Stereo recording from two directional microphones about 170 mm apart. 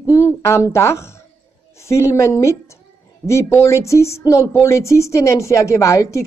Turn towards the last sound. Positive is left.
turn(degrees=15)  # may be behind; listen again after turning